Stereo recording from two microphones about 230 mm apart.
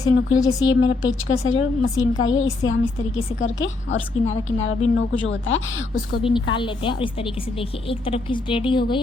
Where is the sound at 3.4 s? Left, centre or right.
Left.